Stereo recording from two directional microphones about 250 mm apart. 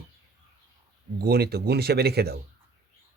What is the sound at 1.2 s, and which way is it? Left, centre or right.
Speech, right.